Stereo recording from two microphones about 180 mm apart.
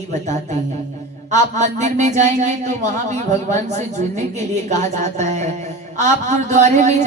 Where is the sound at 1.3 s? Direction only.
40° right (ahead or behind).